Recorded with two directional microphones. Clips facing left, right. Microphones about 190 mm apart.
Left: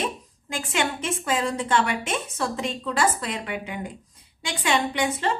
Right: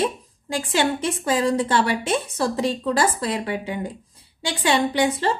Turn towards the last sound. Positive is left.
turn(degrees=-35)  # may be behind; listen again after turning